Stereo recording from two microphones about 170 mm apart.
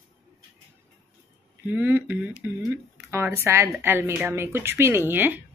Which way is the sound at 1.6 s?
10° right (ahead or behind).